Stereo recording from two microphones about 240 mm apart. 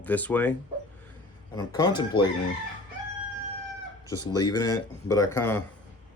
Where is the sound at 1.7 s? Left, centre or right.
Centre.